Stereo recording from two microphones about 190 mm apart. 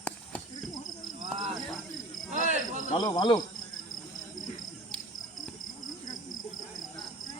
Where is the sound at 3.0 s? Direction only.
20° left (ahead or behind).